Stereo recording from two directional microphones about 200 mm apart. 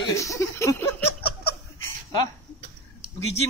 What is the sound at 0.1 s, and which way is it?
Speech, 15° left (ahead or behind).